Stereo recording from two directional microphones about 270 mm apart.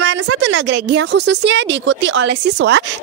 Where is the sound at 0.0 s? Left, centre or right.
Right.